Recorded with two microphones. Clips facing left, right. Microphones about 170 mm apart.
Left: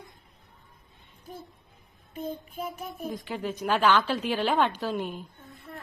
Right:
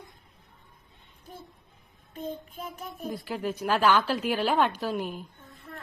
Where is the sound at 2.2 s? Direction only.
5° left (ahead or behind).